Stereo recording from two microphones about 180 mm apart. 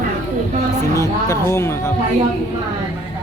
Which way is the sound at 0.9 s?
15° left (ahead or behind).